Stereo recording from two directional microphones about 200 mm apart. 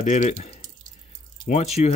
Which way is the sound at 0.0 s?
35° left (ahead or behind).